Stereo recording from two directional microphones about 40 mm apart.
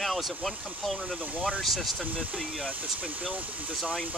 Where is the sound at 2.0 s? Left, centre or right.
Right.